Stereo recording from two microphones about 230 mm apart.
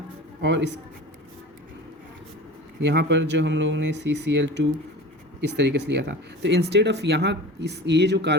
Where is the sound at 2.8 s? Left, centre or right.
Right.